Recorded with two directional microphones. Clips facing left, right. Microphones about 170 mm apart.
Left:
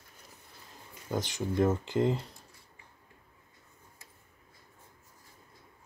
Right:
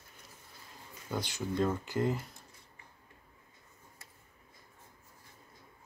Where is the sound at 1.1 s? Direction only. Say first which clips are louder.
Left 3 dB; 15° left (ahead or behind).